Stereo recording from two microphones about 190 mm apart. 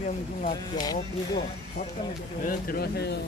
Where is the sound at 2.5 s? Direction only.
50° left (ahead or behind).